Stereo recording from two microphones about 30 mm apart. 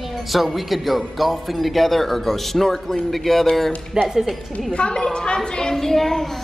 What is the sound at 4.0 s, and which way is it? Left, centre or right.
Speech, right.